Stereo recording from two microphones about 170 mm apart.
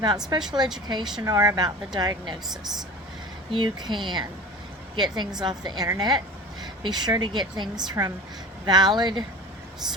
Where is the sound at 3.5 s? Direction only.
30° right (ahead or behind).